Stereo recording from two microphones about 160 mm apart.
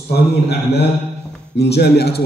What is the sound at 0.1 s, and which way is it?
A man's voice, 90° left.